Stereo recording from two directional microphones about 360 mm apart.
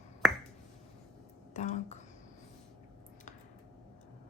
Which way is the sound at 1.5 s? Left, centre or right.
Centre.